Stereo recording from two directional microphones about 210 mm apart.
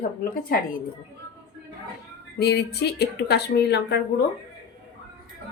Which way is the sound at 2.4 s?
50° left (ahead or behind).